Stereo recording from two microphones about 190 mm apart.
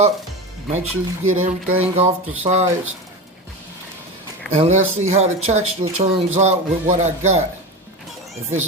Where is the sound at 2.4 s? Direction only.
35° right (ahead or behind).